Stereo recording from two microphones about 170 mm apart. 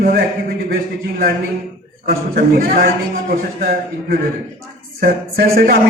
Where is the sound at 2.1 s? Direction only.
60° right (ahead or behind).